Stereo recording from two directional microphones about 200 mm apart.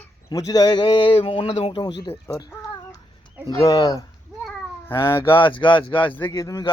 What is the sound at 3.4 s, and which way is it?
Speech, 15° left (ahead or behind).